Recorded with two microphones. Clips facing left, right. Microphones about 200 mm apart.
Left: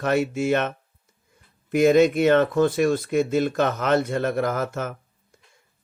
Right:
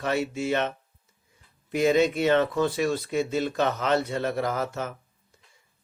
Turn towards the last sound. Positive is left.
turn(degrees=50)  # may be behind; listen again after turning